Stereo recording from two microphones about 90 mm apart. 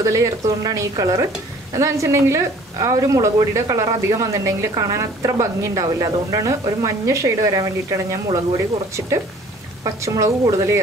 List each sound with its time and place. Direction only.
0.0 s a woman's voice: 35° right (ahead or behind)
10.0 s a woman's voice: 40° right (ahead or behind)